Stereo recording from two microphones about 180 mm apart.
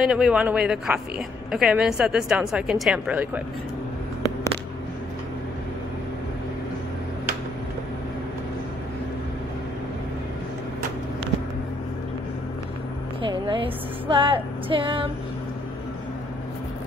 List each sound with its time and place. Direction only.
0.0 s a woman's voice: 5° right (ahead or behind)
13.2 s speech: 25° right (ahead or behind)